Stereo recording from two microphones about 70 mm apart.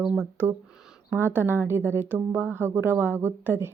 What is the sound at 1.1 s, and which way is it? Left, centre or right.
A woman's voice, right.